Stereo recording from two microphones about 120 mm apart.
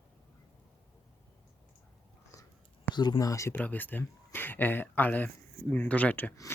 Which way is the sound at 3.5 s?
15° left (ahead or behind).